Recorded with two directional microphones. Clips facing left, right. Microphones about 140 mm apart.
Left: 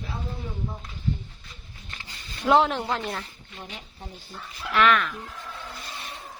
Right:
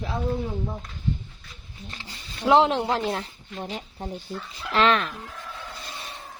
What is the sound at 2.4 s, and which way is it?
Speech, 25° right (ahead or behind).